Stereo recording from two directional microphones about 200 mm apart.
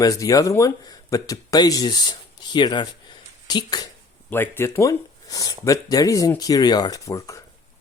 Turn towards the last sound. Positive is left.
turn(degrees=15)  # may be behind; listen again after turning